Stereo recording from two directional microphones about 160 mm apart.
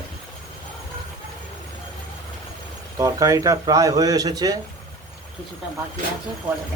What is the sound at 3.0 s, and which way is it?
A man's voice, 20° right (ahead or behind).